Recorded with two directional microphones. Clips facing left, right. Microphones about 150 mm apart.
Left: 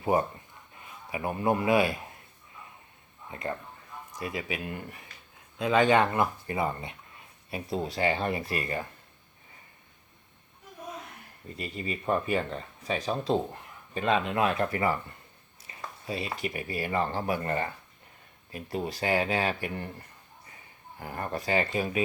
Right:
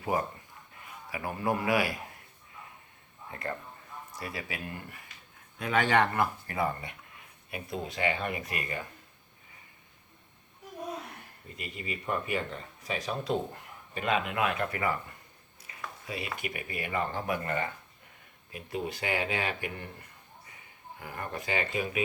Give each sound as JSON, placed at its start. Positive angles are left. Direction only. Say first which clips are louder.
{"t": 0.0, "sound": "a man's voice", "louder": "left 5 dB", "side_deg": 25}
{"t": 4.1, "sound": "speech", "louder": "left 5 dB", "side_deg": 20}
{"t": 7.5, "sound": "speech", "louder": "left 4 dB", "side_deg": 35}
{"t": 11.5, "sound": "speech", "louder": "left 4 dB", "side_deg": 35}